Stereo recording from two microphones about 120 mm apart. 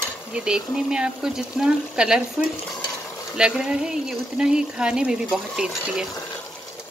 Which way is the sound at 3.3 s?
5° right (ahead or behind).